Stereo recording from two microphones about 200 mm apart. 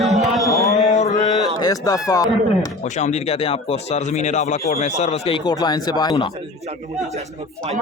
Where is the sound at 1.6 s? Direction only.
15° left (ahead or behind).